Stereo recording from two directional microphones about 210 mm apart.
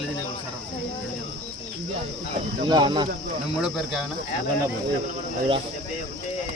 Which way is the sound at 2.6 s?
20° right (ahead or behind).